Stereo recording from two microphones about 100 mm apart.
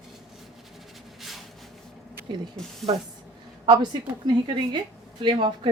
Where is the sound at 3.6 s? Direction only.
50° right (ahead or behind).